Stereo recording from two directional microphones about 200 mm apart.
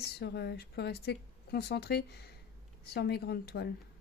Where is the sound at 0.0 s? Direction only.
55° left (ahead or behind).